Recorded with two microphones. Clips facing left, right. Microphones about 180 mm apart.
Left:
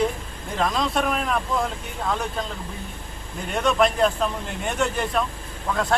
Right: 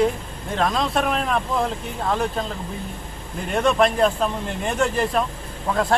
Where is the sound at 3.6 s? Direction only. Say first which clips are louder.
Right 1 dB; centre (ahead or behind).